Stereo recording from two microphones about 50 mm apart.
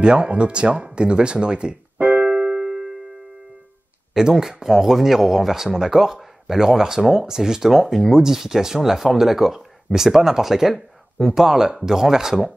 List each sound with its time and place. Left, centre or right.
0.0 s speech: centre
2.2 s music: centre
4.1 s speech: centre